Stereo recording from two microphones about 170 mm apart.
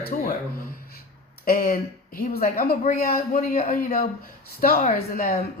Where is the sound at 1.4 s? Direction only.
55° left (ahead or behind).